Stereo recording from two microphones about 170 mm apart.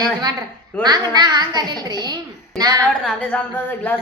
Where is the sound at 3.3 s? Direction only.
5° left (ahead or behind).